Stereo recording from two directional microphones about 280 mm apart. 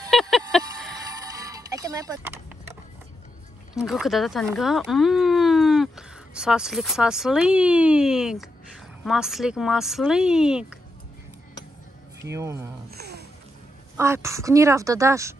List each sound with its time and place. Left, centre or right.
0.1 s a sound: centre
1.5 s music: centre
3.7 s speech: centre
12.3 s a woman's voice: centre
12.9 s a sound: right
13.9 s a woman's voice: centre